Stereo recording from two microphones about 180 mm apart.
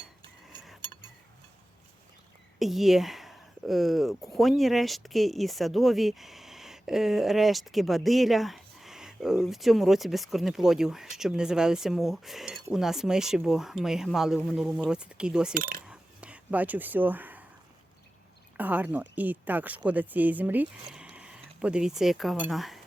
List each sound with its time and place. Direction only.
2.6 s speech: centre (ahead or behind)
15.5 s coin: 50° right (ahead or behind)
15.9 s a sound: 5° right (ahead or behind)
18.5 s speech: 10° right (ahead or behind)